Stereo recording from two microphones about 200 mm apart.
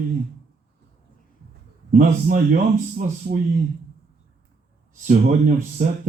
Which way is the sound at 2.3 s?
40° right (ahead or behind).